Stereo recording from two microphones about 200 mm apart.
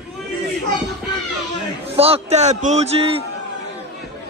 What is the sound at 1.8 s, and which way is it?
A man's voice, 30° right (ahead or behind).